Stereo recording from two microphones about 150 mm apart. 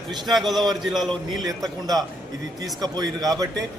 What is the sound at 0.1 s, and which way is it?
A man's voice, centre (ahead or behind).